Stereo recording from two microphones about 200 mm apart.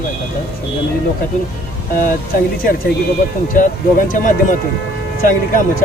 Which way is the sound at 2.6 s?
45° left (ahead or behind).